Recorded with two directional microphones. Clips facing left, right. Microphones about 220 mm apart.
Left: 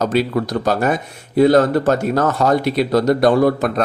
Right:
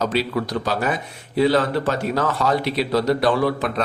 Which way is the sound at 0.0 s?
50° left (ahead or behind).